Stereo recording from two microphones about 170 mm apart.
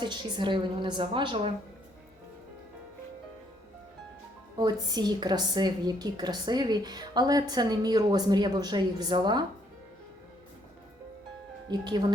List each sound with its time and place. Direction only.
0.0 s a woman's voice: 25° right (ahead or behind)
4.5 s a woman's voice: 25° right (ahead or behind)
11.7 s a woman's voice: 25° right (ahead or behind)